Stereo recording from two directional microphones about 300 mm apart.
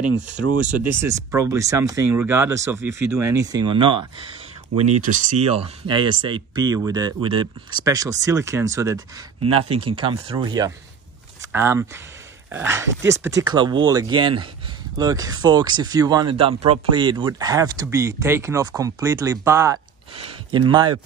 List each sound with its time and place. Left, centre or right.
1.0 s speech: centre